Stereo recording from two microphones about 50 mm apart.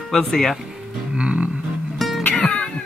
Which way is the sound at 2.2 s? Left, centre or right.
Left.